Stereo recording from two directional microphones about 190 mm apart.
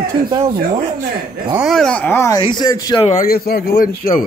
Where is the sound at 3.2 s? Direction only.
55° left (ahead or behind).